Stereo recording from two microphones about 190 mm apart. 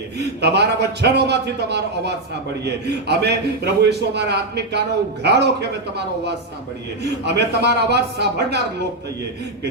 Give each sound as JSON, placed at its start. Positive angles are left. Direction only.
{"t": 0.2, "sound": "a man's voice", "side_deg": -60}
{"t": 7.0, "sound": "a man's voice", "side_deg": -60}